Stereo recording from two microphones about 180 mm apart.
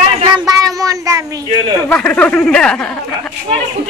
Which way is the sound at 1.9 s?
5° left (ahead or behind).